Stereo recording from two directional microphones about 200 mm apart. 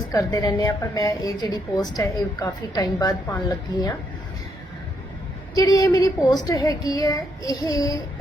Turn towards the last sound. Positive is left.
turn(degrees=15)  # may be behind; listen again after turning